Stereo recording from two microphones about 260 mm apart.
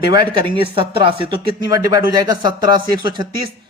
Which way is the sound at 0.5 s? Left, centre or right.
Centre.